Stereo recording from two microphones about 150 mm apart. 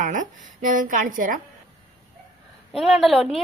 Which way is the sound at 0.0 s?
60° right (ahead or behind).